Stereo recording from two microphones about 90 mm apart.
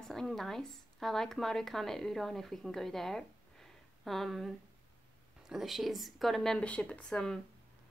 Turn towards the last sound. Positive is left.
turn(degrees=10)  # may be behind; listen again after turning